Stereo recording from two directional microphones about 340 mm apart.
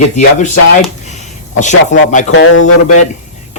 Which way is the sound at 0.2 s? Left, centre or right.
Left.